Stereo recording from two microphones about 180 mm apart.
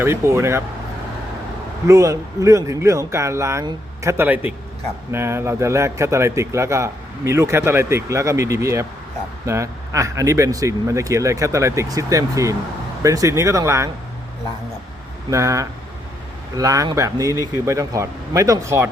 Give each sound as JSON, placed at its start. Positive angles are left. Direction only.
{"t": 0.0, "sound": "speech", "side_deg": -15}
{"t": 1.9, "sound": "speech", "side_deg": -15}
{"t": 15.3, "sound": "speech", "side_deg": -15}